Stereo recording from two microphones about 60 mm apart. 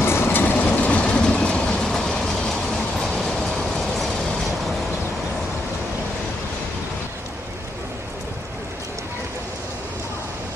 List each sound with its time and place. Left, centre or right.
0.0 s train: left; by 4.7 s centre